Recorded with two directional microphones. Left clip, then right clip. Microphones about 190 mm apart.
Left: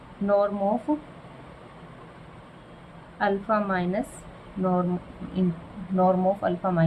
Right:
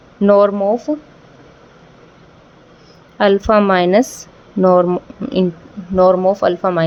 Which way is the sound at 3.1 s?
60° right (ahead or behind).